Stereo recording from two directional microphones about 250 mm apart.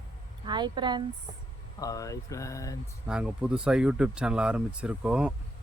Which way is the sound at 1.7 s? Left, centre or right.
Centre.